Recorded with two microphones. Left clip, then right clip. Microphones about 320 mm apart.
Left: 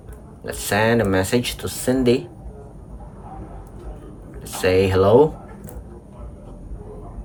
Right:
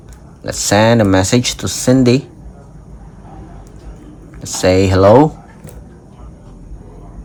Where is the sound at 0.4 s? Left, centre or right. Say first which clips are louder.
Right 8 dB; centre.